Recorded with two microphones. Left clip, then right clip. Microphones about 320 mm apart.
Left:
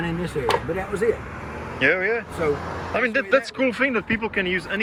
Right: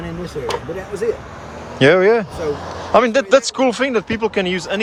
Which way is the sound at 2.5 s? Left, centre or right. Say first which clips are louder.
Right 1 dB; right.